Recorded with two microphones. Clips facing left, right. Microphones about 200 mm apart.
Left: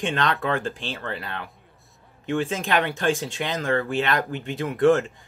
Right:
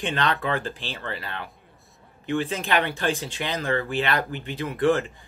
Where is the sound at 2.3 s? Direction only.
45° left (ahead or behind).